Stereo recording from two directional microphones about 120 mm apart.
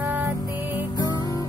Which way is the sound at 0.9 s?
35° left (ahead or behind).